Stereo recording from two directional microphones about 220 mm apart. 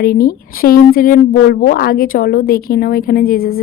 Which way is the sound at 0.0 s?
40° left (ahead or behind).